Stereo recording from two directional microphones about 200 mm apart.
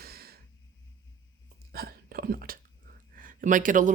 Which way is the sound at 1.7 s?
50° right (ahead or behind).